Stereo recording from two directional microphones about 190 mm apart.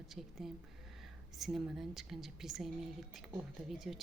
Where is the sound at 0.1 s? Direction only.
Centre (ahead or behind).